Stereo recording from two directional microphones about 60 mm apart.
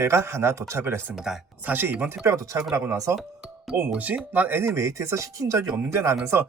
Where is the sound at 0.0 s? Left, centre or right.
Right.